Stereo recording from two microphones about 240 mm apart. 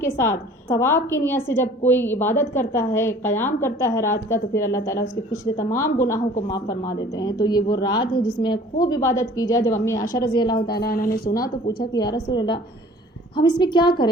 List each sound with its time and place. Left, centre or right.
0.0 s a woman's voice: centre
10.7 s speech: left
12.3 s a woman's voice: centre